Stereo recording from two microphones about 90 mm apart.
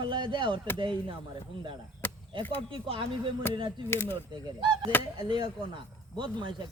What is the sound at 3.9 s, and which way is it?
Speech, 25° left (ahead or behind).